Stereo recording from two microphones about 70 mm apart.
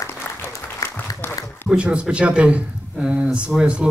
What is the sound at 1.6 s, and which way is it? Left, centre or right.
Speech, centre.